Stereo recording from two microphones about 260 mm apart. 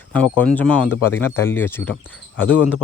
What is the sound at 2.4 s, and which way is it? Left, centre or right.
Speech, left.